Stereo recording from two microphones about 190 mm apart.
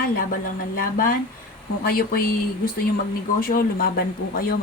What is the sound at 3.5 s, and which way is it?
Speech, 50° left (ahead or behind).